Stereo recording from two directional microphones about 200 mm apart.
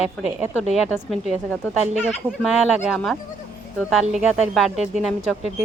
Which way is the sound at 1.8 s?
35° right (ahead or behind).